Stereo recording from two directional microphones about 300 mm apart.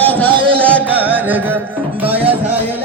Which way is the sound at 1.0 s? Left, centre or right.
Centre.